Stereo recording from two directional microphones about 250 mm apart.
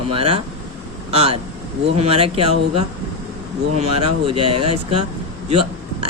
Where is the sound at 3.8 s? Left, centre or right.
Right.